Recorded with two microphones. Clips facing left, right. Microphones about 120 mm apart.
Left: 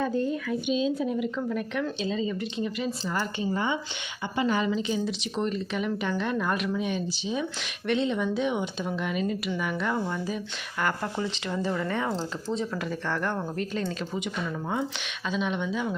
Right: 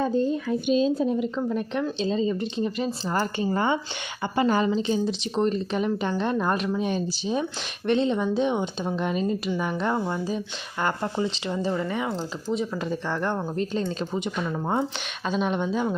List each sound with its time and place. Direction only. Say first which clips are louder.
0.0 s speech: right 3 dB; 25° right (ahead or behind)
0.7 s speech: right 5 dB; 40° right (ahead or behind)
15.3 s speech: right 4 dB; 40° right (ahead or behind)